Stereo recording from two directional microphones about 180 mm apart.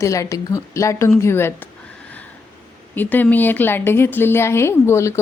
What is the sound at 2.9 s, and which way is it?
A woman's voice, 10° left (ahead or behind).